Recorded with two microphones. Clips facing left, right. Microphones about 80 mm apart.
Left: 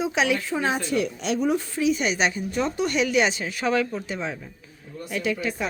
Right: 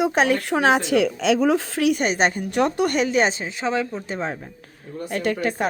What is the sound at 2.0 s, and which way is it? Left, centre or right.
Speech, right.